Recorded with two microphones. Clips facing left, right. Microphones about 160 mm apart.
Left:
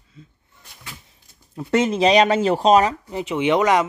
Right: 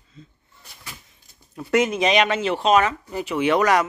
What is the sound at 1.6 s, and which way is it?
Speech, 25° left (ahead or behind).